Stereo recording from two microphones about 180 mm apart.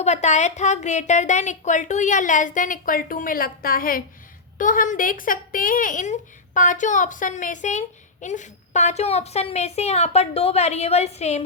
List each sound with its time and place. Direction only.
0.0 s speech: 40° left (ahead or behind)